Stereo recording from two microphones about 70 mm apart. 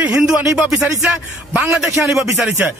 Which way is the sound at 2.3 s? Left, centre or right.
Centre.